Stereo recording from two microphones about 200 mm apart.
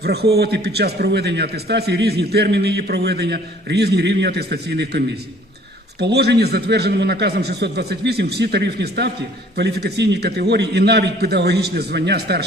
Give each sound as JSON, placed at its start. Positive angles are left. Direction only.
{"t": 0.0, "sound": "a man's voice", "side_deg": -55}